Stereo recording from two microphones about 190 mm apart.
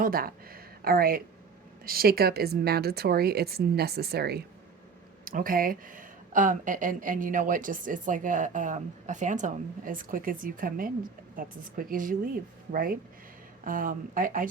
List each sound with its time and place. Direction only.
0.0 s speech: 50° right (ahead or behind)